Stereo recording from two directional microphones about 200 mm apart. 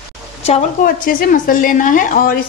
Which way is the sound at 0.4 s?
30° left (ahead or behind).